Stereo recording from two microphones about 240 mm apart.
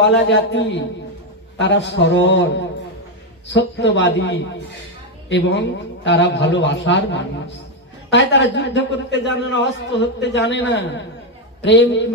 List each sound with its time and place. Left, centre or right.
0.2 s a man's voice: left